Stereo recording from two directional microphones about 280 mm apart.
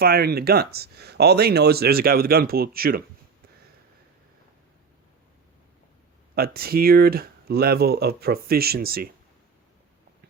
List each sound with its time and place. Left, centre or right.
0.0 s speech: right
6.3 s speech: right